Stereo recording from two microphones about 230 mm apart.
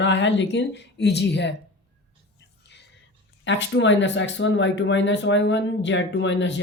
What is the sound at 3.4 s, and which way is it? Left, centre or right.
Speech, left.